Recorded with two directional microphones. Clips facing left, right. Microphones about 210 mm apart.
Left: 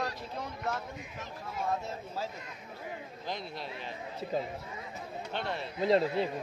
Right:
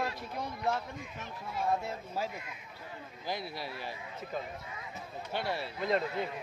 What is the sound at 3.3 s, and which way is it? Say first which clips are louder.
Speech: right 1 dB; 5° right (ahead or behind).